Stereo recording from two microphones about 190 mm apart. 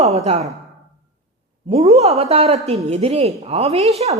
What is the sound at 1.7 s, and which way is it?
A woman's voice, 35° right (ahead or behind).